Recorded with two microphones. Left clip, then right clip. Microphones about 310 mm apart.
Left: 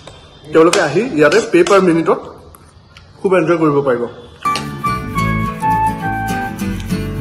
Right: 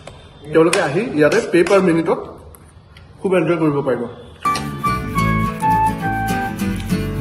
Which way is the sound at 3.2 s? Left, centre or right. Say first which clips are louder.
Left 4 dB; centre.